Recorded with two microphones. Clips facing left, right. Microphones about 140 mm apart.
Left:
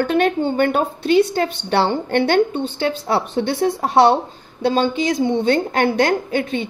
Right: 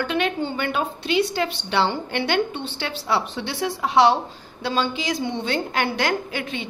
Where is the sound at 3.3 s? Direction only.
55° left (ahead or behind).